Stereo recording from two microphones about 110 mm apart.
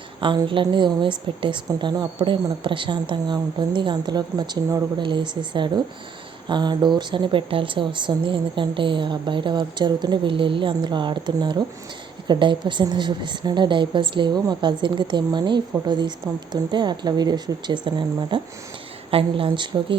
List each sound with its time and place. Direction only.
0.4 s a woman's voice: 50° right (ahead or behind)
19.1 s a woman's voice: 55° right (ahead or behind)